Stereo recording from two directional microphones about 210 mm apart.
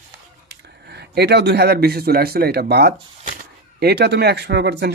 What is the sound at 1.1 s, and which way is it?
Speech, 50° right (ahead or behind).